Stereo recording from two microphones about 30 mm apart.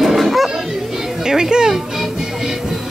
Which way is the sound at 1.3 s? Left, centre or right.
Right.